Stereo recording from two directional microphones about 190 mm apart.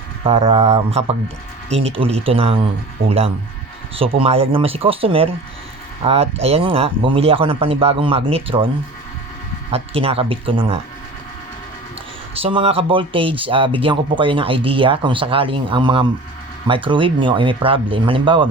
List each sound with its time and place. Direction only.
0.3 s speech: 30° right (ahead or behind)
9.7 s speech: 30° right (ahead or behind)
12.3 s speech: 30° right (ahead or behind)